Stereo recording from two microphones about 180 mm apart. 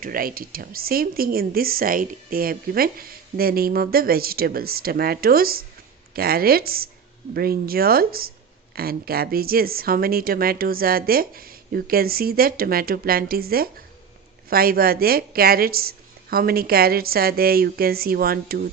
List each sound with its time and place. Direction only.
0.0 s speech: 50° right (ahead or behind)